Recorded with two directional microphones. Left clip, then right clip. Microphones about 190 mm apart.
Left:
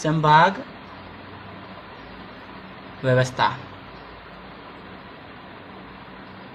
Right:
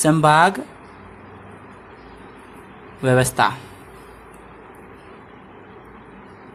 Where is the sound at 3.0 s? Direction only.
60° right (ahead or behind).